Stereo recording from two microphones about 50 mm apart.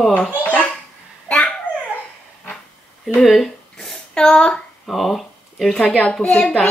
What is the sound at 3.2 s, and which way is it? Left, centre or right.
Speech, centre.